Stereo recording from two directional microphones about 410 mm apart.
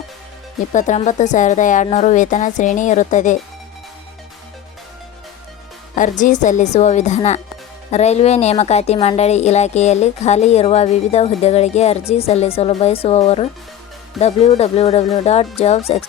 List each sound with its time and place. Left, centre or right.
0.7 s speech: centre
6.0 s speech: centre